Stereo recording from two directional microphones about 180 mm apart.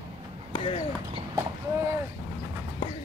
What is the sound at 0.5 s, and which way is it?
Speech, 30° left (ahead or behind).